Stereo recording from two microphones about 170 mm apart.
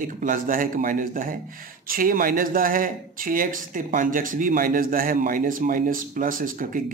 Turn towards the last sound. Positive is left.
turn(degrees=-55)  # may be behind; listen again after turning